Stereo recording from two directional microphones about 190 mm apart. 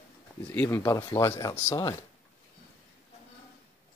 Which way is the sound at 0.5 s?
10° left (ahead or behind).